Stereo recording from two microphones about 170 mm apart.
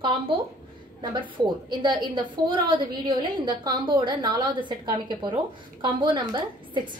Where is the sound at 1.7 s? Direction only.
25° right (ahead or behind).